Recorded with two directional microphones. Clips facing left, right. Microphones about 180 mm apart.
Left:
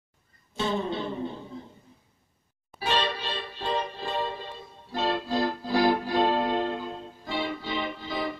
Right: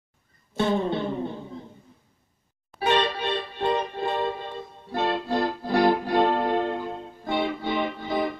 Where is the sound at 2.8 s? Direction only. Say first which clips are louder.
Right 5 dB; 55° right (ahead or behind).